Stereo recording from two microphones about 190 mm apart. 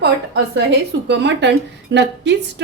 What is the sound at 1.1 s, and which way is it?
A woman's voice, 65° right (ahead or behind).